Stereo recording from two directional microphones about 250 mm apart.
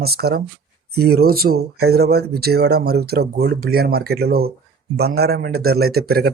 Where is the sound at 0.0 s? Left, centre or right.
Right.